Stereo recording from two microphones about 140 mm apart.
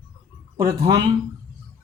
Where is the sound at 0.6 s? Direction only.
20° right (ahead or behind).